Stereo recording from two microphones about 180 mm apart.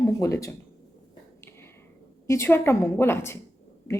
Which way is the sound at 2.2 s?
15° left (ahead or behind).